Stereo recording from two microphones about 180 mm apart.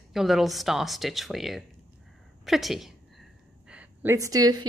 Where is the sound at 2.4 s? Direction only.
Centre (ahead or behind).